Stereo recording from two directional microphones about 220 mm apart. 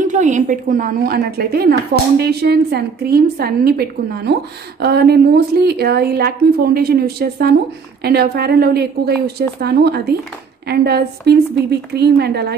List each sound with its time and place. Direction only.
0.0 s a woman's voice: 35° right (ahead or behind)